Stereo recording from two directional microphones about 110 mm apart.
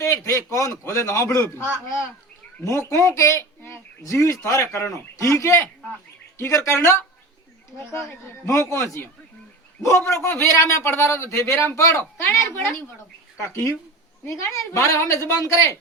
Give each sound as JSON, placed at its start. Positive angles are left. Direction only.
{"t": 0.0, "sound": "a man's voice", "side_deg": 25}
{"t": 2.6, "sound": "speech", "side_deg": 25}
{"t": 8.4, "sound": "speech", "side_deg": 25}